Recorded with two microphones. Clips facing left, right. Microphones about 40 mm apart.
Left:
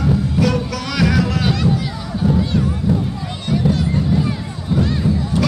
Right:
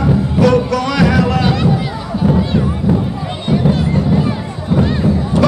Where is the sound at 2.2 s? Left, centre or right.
Right.